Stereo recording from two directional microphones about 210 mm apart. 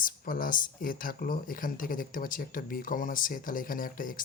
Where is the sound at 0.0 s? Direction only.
40° left (ahead or behind).